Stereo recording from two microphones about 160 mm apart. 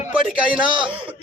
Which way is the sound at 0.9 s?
30° right (ahead or behind).